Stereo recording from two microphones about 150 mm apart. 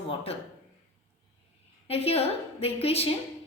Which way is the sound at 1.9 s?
40° left (ahead or behind).